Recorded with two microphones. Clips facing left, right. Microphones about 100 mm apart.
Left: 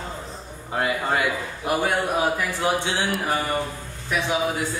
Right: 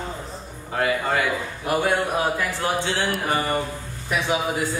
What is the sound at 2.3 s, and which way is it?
Speech, 15° left (ahead or behind).